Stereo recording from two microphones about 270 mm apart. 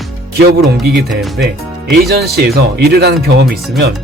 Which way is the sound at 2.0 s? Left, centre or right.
Right.